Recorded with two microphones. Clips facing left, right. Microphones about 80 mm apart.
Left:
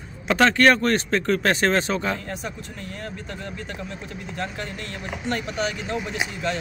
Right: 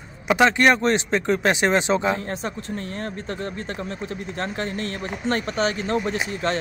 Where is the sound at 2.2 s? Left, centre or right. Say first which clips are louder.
Right 3 dB; right.